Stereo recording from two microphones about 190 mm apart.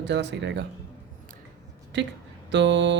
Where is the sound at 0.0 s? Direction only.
65° right (ahead or behind).